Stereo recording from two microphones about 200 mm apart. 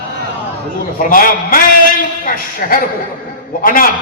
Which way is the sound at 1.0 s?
45° left (ahead or behind).